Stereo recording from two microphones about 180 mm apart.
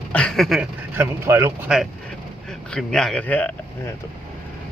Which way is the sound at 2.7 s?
5° left (ahead or behind).